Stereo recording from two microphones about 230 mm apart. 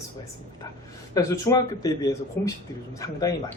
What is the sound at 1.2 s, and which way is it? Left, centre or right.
Speech, centre.